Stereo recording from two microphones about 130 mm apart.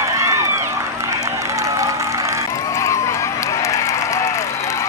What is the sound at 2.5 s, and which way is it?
Applause, 25° left (ahead or behind).